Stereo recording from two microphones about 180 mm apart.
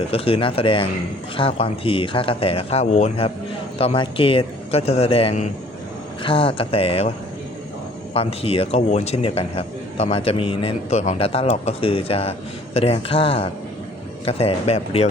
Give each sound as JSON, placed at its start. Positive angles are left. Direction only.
{"t": 0.1, "sound": "a man's voice", "side_deg": 30}
{"t": 8.1, "sound": "a man's voice", "side_deg": 35}